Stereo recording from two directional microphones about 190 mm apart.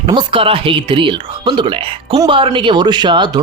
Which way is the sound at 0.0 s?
25° right (ahead or behind).